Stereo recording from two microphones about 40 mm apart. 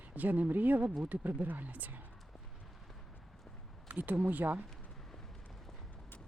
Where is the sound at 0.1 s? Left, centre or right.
Right.